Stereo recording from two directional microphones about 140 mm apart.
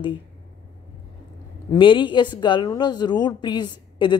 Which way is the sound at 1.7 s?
35° left (ahead or behind).